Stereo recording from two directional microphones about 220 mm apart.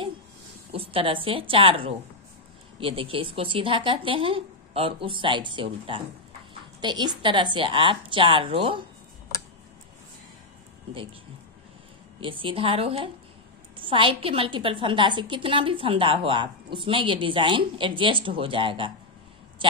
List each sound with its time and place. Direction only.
0.7 s a woman's voice: 25° right (ahead or behind)
12.2 s a woman's voice: 25° right (ahead or behind)